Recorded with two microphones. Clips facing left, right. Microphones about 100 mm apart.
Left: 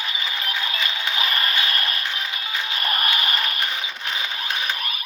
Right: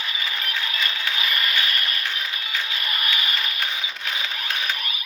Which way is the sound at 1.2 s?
35° left (ahead or behind).